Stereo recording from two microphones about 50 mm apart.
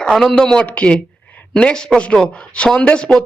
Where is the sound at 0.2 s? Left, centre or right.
Centre.